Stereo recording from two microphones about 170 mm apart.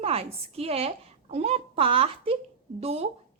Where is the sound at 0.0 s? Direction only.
35° right (ahead or behind).